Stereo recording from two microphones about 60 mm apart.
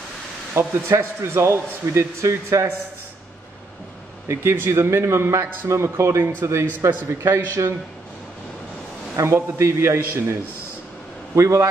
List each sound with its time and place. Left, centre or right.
0.6 s a man's voice: right
4.3 s a man's voice: right
9.1 s a man's voice: right
11.3 s a man's voice: right